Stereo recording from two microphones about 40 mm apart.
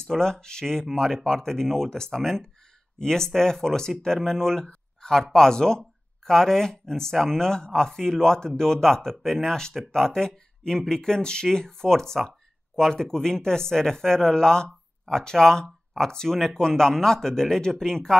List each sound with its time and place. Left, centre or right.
0.0 s speech: centre